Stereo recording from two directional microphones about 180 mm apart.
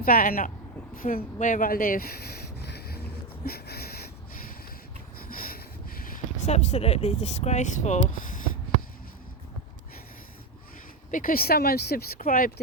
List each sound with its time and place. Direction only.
0.0 s speech: 55° left (ahead or behind)
0.9 s a sound: 50° left (ahead or behind)
6.5 s speech: 35° left (ahead or behind)
11.1 s speech: 50° left (ahead or behind)